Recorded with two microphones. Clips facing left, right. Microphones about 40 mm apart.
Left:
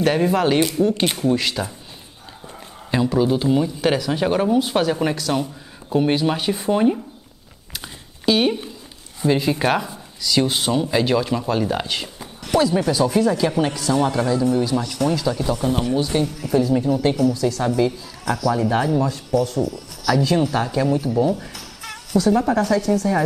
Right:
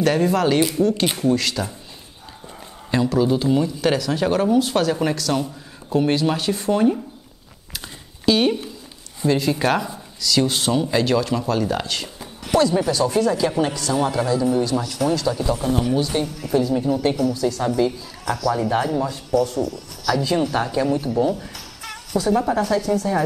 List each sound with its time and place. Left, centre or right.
0.0 s speech: centre
2.9 s speech: centre
7.7 s a sound: centre
9.3 s a woman's voice: centre